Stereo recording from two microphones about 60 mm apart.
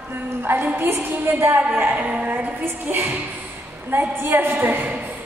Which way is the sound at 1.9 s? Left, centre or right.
Right.